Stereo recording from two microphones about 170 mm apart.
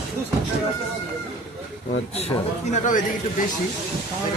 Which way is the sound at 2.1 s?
40° left (ahead or behind).